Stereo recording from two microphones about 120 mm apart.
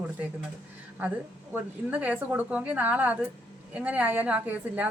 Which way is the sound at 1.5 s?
15° right (ahead or behind).